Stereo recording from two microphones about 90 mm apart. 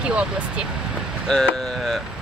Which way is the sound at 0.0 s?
10° right (ahead or behind).